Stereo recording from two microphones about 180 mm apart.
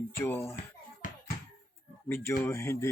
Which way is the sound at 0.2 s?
15° left (ahead or behind).